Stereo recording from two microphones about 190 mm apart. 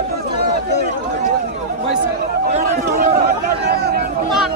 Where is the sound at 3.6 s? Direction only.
55° right (ahead or behind).